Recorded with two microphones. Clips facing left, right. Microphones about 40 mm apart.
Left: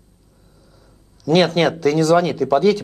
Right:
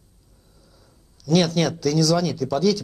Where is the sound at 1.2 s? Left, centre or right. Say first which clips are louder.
Left 5 dB; left.